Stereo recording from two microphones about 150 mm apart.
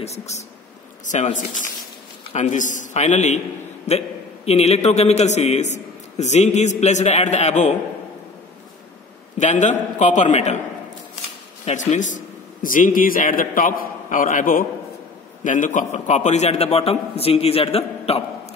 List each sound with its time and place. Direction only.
0.0 s a man's voice: 45° left (ahead or behind)
9.4 s a man's voice: 50° left (ahead or behind)
11.6 s a man's voice: 50° left (ahead or behind)